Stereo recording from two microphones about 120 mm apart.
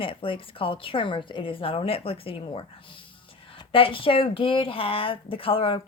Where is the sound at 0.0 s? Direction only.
50° left (ahead or behind).